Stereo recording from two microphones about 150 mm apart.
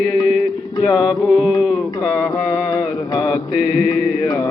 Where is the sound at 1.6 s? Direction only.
5° right (ahead or behind).